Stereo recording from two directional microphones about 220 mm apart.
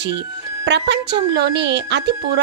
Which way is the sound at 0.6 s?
50° right (ahead or behind).